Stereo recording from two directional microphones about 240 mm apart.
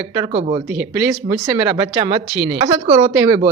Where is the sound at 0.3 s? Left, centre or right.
Right.